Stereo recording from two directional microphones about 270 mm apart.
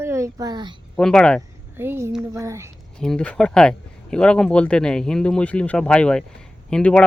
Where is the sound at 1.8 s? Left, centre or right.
Centre.